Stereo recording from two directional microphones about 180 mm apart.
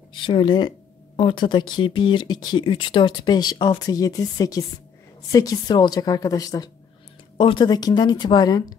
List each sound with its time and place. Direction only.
0.1 s speech: 25° left (ahead or behind)